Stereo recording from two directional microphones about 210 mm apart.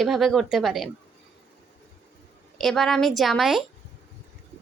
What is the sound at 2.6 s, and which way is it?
Speech, centre (ahead or behind).